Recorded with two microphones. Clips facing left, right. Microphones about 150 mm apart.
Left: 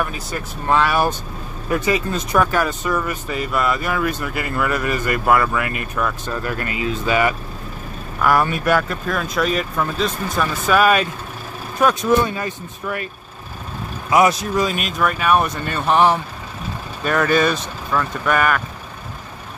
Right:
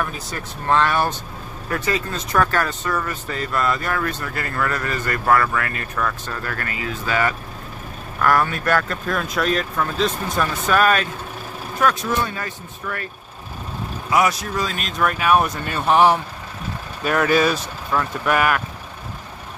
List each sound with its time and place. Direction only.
0.0 s speech: 5° left (ahead or behind)
9.0 s speech: centre (ahead or behind); by 13.1 s 15° left (ahead or behind)
14.1 s speech: 20° left (ahead or behind); by 18.6 s 5° right (ahead or behind)